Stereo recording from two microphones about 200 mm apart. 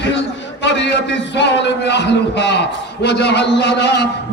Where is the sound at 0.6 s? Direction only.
60° left (ahead or behind).